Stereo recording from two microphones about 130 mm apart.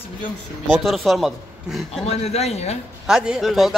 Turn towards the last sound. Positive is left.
turn(degrees=0)  # may be behind; listen again after turning